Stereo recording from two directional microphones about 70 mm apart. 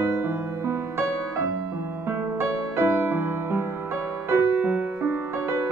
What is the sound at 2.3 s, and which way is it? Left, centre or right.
Music, right.